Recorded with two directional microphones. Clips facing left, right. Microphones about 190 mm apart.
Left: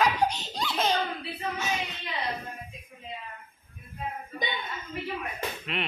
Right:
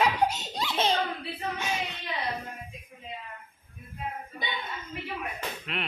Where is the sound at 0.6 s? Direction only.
25° right (ahead or behind).